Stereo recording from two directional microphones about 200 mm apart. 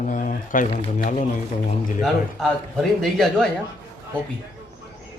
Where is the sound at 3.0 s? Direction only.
Centre (ahead or behind).